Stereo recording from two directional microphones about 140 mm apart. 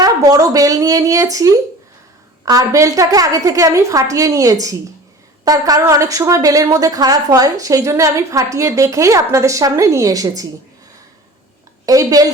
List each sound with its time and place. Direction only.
0.0 s speech: 25° right (ahead or behind)
11.9 s speech: 25° right (ahead or behind)